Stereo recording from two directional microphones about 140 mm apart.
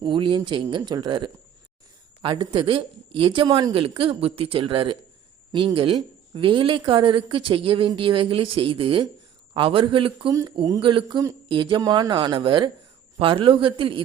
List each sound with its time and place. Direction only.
0.0 s a woman's voice: 35° right (ahead or behind)